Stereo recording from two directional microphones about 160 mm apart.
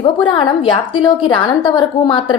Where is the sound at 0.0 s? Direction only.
30° left (ahead or behind).